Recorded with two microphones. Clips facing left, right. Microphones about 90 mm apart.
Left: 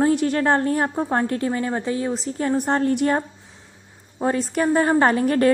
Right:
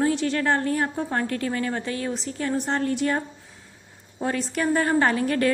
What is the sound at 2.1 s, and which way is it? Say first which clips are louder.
A woman's voice: left 4 dB; 35° left (ahead or behind).